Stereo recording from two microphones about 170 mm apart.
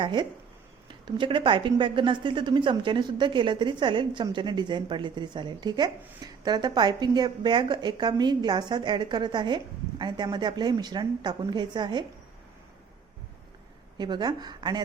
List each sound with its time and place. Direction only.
0.0 s speech: 25° right (ahead or behind)
14.0 s speech: 25° right (ahead or behind)